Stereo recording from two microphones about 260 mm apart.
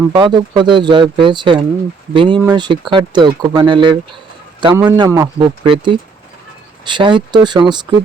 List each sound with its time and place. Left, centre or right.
0.1 s speech: centre